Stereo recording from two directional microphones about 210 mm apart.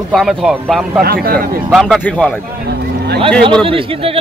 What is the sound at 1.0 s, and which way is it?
Speech, 45° right (ahead or behind).